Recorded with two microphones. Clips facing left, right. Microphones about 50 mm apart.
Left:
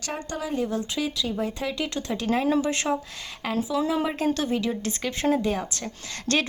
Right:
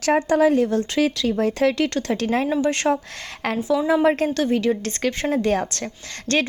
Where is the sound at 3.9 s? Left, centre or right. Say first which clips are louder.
Right 7 dB; right.